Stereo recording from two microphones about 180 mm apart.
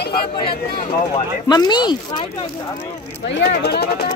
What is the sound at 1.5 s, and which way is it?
Speech, 25° left (ahead or behind).